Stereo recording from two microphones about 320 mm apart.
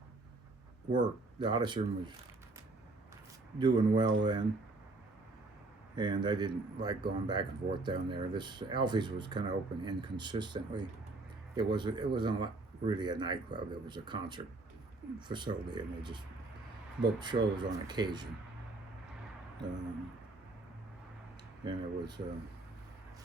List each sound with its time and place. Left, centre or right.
0.9 s speech: centre
3.6 s speech: centre
6.0 s speech: centre
21.6 s speech: centre